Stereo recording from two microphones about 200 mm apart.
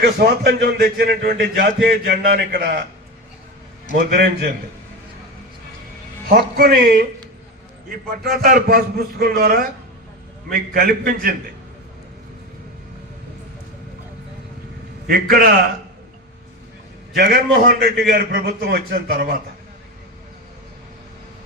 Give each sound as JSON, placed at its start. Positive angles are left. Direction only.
{"t": 0.0, "sound": "a man's voice", "side_deg": -55}
{"t": 3.9, "sound": "a man's voice", "side_deg": -50}
{"t": 6.2, "sound": "a man's voice", "side_deg": -50}
{"t": 8.2, "sound": "a man's voice", "side_deg": -50}
{"t": 15.0, "sound": "a man's voice", "side_deg": -50}
{"t": 17.2, "sound": "a man's voice", "side_deg": -55}